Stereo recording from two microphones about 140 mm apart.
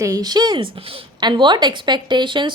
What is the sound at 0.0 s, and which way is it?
Speech, 25° right (ahead or behind).